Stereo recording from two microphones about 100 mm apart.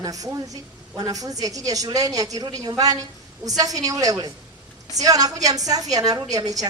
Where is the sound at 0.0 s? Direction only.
35° right (ahead or behind).